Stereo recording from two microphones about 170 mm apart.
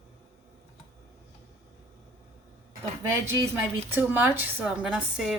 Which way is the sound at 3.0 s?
15° right (ahead or behind).